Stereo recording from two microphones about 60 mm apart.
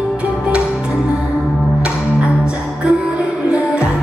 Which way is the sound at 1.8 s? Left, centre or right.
Centre.